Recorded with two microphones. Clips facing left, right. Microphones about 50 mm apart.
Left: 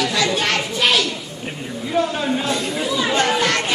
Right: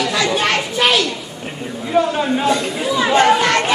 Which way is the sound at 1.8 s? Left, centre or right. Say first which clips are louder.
Right 4 dB; centre.